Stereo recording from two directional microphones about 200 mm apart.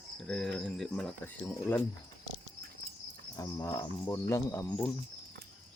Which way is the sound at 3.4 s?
15° left (ahead or behind).